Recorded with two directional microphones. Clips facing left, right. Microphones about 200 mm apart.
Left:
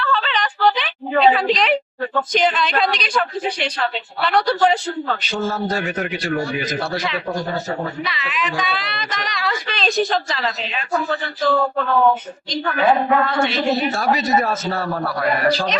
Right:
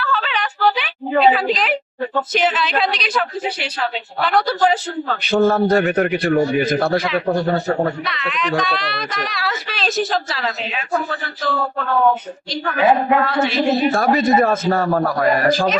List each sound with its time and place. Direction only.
0.0 s a sound: 5° right (ahead or behind)
2.3 s speech: 5° right (ahead or behind)
5.2 s a man's voice: 60° right (ahead or behind)
8.0 s speech: centre (ahead or behind)
12.8 s a woman's voice: 15° right (ahead or behind)
13.2 s speech: 5° right (ahead or behind)
13.9 s a man's voice: 55° right (ahead or behind)